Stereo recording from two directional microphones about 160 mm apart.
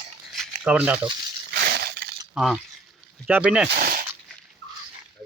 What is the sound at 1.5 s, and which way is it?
Crushing, 90° right.